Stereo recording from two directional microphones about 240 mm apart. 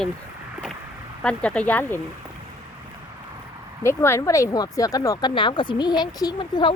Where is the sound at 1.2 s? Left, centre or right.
Centre.